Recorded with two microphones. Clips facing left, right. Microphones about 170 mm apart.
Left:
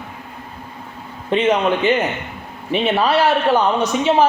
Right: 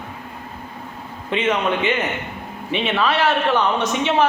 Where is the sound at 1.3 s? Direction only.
35° left (ahead or behind).